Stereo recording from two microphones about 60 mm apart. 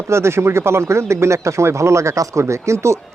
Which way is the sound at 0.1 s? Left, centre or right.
Right.